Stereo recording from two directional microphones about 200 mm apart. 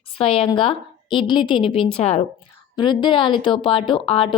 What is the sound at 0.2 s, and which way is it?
A woman's voice, 30° left (ahead or behind).